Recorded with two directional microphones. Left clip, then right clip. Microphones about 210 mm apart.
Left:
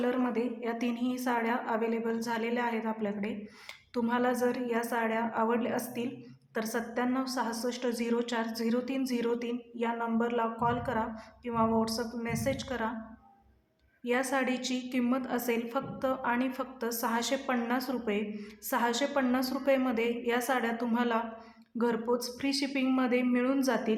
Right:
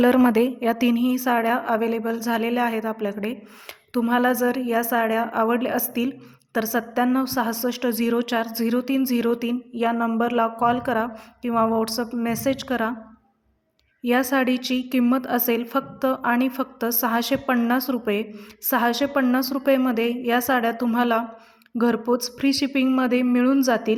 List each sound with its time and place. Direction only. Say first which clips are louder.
0.0 s a woman's voice: right 13 dB; 50° right (ahead or behind)
14.0 s a woman's voice: right 9 dB; 40° right (ahead or behind)